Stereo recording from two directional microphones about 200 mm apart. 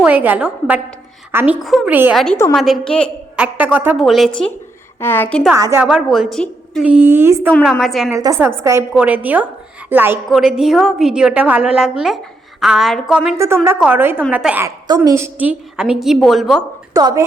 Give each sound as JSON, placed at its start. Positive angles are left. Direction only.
{"t": 0.0, "sound": "a woman's voice", "side_deg": -5}
{"t": 2.1, "sound": "a woman's voice", "side_deg": 5}
{"t": 3.3, "sound": "a woman's voice", "side_deg": -5}
{"t": 4.9, "sound": "a woman's voice", "side_deg": 10}
{"t": 5.5, "sound": "a woman's voice", "side_deg": -15}
{"t": 5.8, "sound": "a woman's voice", "side_deg": -5}
{"t": 7.6, "sound": "a woman's voice", "side_deg": 0}
{"t": 8.1, "sound": "a woman's voice", "side_deg": -15}
{"t": 13.3, "sound": "a woman's voice", "side_deg": -15}
{"t": 16.9, "sound": "a woman's voice", "side_deg": -15}